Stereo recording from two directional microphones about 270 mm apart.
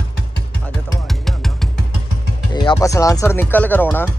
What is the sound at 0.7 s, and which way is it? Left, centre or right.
Music, centre.